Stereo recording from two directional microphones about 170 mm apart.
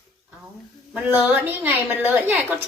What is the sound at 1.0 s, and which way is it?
A woman's voice, 10° right (ahead or behind).